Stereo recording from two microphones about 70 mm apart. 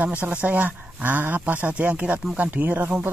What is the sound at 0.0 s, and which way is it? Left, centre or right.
Speech, right.